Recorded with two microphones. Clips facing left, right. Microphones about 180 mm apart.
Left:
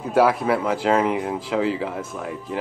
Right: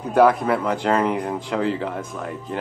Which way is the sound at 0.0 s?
5° left (ahead or behind).